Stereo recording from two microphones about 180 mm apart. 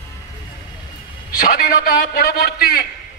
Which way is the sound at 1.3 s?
50° left (ahead or behind).